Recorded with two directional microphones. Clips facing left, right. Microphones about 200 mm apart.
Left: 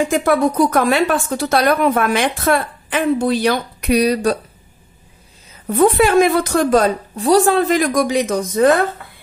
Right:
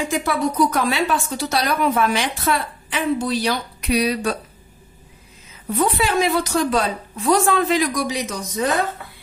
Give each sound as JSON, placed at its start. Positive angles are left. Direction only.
{"t": 0.1, "sound": "speech", "side_deg": 50}
{"t": 5.7, "sound": "speech", "side_deg": 50}